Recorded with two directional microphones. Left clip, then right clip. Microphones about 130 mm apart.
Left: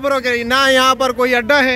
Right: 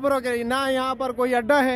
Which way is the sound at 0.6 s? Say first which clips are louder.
Left 12 dB; 15° right (ahead or behind).